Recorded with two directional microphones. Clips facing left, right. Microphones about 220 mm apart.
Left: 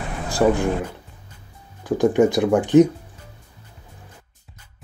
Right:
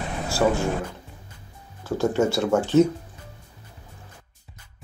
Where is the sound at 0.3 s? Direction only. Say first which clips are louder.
Left 4 dB; 15° left (ahead or behind).